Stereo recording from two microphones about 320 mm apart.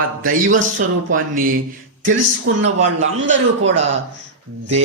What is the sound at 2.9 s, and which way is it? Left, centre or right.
Speech, right.